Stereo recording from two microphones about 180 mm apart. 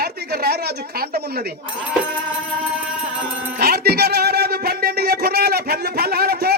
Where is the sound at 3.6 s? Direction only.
60° right (ahead or behind).